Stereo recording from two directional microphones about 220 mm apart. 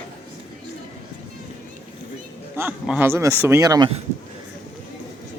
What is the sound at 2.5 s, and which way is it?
Speech, 5° right (ahead or behind).